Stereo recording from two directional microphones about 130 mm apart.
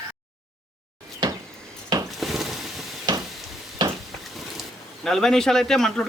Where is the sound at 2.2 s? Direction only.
Centre (ahead or behind).